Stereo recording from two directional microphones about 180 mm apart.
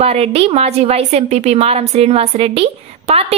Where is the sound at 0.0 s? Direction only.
35° right (ahead or behind).